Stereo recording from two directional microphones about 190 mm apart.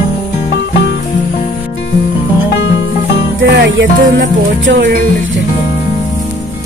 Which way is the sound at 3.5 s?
70° right (ahead or behind).